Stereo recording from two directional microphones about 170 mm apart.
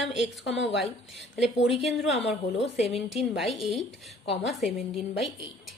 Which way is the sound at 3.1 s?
Centre (ahead or behind).